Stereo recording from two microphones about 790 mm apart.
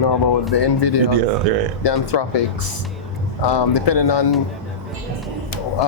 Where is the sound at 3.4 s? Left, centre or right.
Left.